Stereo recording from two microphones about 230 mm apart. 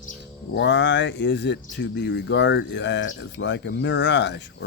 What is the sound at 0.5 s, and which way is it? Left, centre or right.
Speech, left.